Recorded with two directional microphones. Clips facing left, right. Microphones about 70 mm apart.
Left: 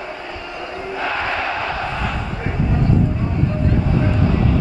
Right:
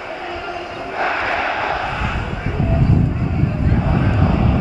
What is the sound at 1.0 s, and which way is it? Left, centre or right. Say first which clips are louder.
Battle cry: right 3 dB; centre.